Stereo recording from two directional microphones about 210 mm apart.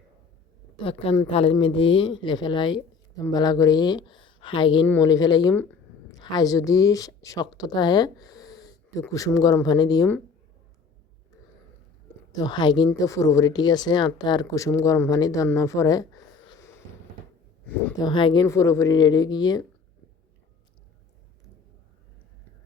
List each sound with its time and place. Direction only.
0.8 s a woman's voice: 25° left (ahead or behind)
12.3 s speech: 20° left (ahead or behind)
18.0 s speech: 25° left (ahead or behind)